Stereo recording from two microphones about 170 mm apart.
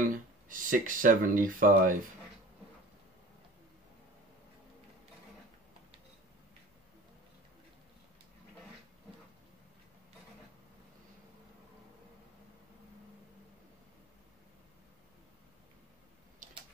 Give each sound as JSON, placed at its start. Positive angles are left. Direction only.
{"t": 0.1, "sound": "speech", "side_deg": -50}